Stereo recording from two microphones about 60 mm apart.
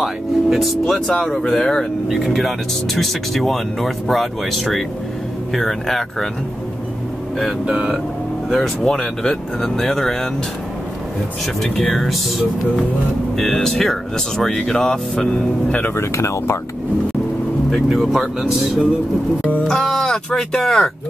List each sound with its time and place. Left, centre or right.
0.0 s speech: centre
7.6 s speech: centre
8.5 s speech: centre
11.6 s speech: centre
16.0 s speech: left
17.8 s speech: centre
19.7 s a sound: centre